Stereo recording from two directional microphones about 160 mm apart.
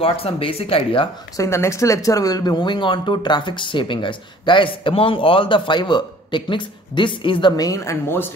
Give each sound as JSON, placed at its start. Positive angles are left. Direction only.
{"t": 0.0, "sound": "speech", "side_deg": 35}
{"t": 1.3, "sound": "speech", "side_deg": 20}